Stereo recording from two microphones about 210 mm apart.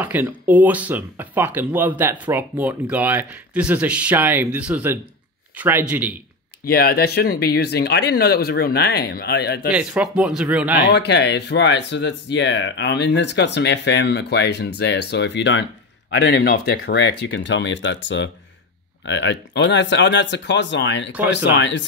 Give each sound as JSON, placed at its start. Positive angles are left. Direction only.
{"t": 0.0, "sound": "speech", "side_deg": -10}
{"t": 6.6, "sound": "speech", "side_deg": 45}
{"t": 9.7, "sound": "a man's voice", "side_deg": -5}
{"t": 10.9, "sound": "speech", "side_deg": 55}